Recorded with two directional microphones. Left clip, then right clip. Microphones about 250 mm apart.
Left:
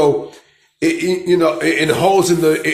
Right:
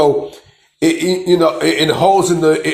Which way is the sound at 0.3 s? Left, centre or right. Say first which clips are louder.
Right 3 dB; centre.